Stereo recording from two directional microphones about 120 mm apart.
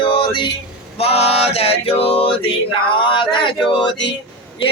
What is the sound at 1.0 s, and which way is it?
Male singing, 60° left (ahead or behind).